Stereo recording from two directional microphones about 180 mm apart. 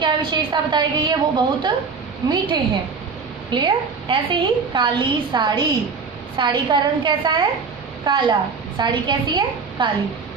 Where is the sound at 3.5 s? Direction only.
25° right (ahead or behind).